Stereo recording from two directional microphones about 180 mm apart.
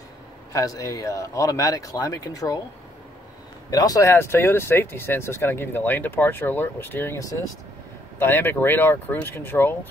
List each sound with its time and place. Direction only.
0.5 s speech: 20° left (ahead or behind)
3.7 s speech: 20° left (ahead or behind)